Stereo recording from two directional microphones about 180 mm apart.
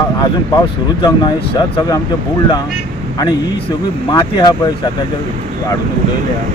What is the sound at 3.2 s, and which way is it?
Speech, 20° left (ahead or behind).